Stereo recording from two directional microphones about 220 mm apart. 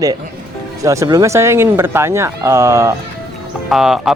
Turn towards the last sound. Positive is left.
turn(degrees=0)  # may be behind; listen again after turning